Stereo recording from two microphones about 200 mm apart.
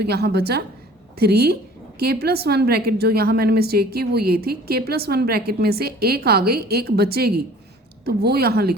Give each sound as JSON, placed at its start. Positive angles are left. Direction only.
{"t": 0.0, "sound": "a woman's voice", "side_deg": -55}